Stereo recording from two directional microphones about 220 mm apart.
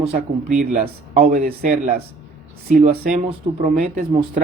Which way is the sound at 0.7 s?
35° right (ahead or behind).